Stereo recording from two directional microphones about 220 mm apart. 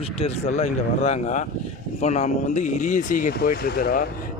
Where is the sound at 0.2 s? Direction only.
30° left (ahead or behind).